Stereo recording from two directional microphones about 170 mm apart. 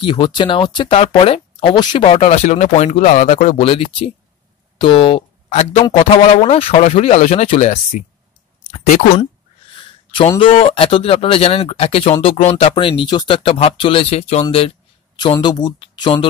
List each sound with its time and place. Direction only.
0.0 s speech: 30° left (ahead or behind); by 8.0 s 45° left (ahead or behind)
10.4 s speech: 30° left (ahead or behind)